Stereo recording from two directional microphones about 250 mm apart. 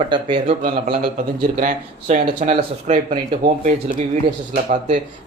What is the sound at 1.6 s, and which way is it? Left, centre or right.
Speech, right.